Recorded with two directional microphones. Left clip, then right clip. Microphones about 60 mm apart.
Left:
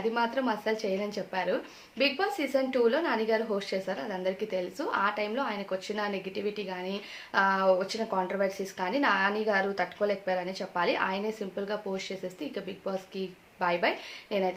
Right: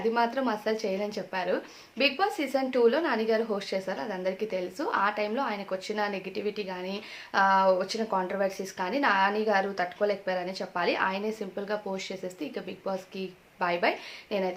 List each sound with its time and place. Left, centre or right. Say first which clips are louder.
0.1 s a woman's voice: right 3 dB; right